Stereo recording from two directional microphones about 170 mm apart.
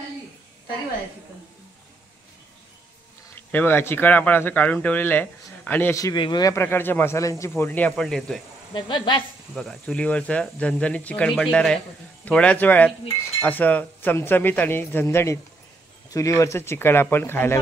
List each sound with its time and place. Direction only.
3.3 s speech: 10° left (ahead or behind)
8.7 s speech: 25° left (ahead or behind)
9.6 s speech: centre (ahead or behind)